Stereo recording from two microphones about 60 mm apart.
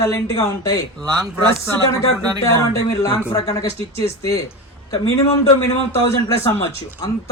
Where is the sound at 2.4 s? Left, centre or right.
Left.